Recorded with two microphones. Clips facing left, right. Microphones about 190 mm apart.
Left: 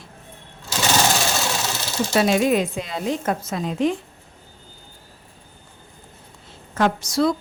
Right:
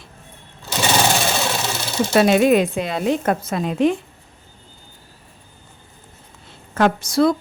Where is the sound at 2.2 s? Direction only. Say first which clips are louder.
Right 4 dB; 65° right (ahead or behind).